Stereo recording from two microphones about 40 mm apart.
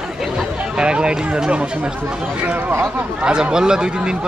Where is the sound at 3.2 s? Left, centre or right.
Right.